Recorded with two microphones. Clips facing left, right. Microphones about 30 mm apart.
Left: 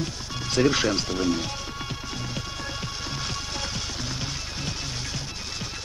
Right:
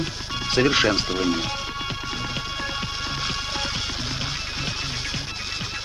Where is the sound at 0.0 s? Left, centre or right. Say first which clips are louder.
Right 4 dB; right.